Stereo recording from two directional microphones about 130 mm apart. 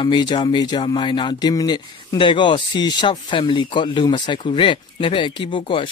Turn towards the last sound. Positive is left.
turn(degrees=40)  # may be behind; listen again after turning